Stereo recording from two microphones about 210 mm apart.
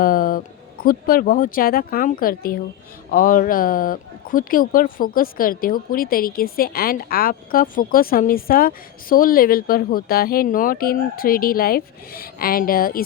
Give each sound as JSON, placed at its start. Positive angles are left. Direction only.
{"t": 0.0, "sound": "speech", "side_deg": 45}